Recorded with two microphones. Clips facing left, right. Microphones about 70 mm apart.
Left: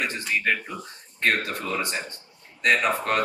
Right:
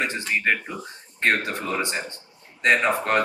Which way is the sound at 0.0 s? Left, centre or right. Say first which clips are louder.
Right 2 dB; right.